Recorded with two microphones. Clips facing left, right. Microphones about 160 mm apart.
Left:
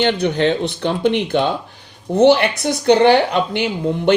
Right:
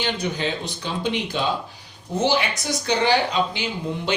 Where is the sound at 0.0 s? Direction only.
60° left (ahead or behind).